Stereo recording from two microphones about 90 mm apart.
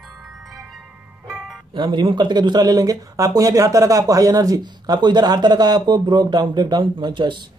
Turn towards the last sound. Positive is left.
turn(degrees=-60)  # may be behind; listen again after turning